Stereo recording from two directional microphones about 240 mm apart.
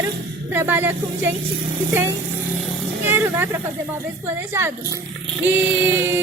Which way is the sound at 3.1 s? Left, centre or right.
Centre.